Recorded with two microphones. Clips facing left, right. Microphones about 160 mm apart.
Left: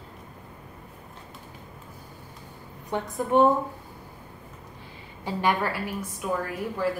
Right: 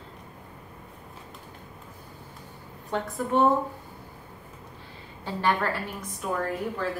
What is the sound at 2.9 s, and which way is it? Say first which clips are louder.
Speech: even; 15° left (ahead or behind).